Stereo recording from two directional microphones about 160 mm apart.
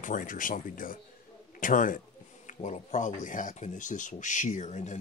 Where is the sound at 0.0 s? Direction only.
55° left (ahead or behind).